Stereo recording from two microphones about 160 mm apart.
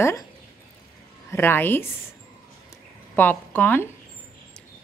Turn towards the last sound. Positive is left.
turn(degrees=10)  # may be behind; listen again after turning